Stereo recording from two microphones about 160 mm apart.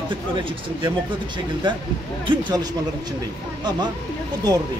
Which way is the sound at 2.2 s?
30° right (ahead or behind).